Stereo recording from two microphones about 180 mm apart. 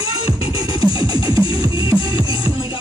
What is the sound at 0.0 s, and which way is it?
Music, 30° left (ahead or behind).